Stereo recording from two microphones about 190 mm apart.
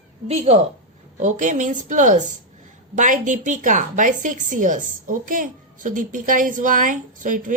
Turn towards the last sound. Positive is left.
turn(degrees=-45)  # may be behind; listen again after turning